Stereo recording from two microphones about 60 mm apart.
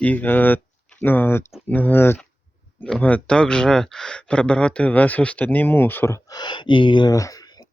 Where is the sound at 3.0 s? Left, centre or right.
Left.